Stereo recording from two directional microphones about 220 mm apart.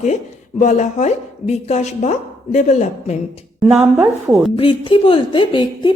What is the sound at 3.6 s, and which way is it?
Speech, 5° right (ahead or behind).